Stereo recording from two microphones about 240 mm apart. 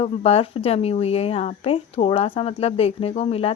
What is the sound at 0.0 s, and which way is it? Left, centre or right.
Speech, left.